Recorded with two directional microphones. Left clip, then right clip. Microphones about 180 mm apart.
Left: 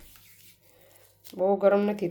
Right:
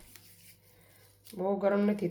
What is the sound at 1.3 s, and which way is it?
Speech, 50° left (ahead or behind).